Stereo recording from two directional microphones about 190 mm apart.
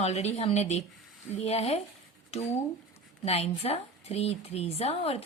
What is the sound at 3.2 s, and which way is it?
A woman's voice, 30° left (ahead or behind).